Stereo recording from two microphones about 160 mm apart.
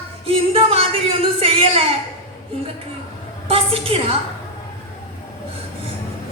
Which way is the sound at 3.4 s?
35° right (ahead or behind).